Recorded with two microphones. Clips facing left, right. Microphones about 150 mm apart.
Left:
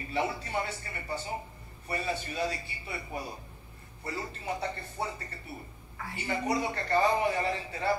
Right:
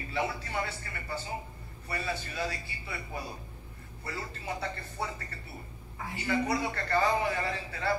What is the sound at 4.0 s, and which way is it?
Speech, 20° left (ahead or behind).